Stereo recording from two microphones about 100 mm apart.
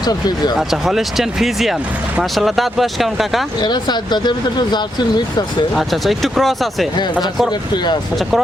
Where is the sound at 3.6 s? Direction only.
45° left (ahead or behind).